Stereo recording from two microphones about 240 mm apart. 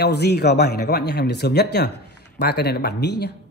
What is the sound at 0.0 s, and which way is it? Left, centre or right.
Speech, left.